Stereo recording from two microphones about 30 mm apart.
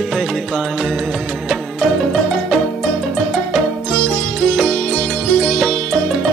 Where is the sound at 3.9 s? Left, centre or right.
Left.